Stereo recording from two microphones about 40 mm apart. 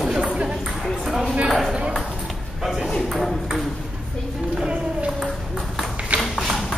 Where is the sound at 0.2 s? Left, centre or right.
Right.